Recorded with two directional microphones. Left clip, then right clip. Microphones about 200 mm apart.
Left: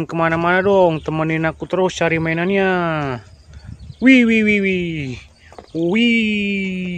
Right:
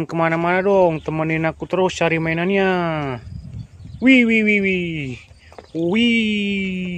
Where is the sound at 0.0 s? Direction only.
5° right (ahead or behind).